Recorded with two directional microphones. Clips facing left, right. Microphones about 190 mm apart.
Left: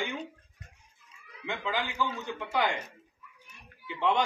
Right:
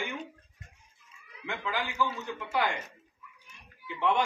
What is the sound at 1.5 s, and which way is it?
Speech, 20° left (ahead or behind).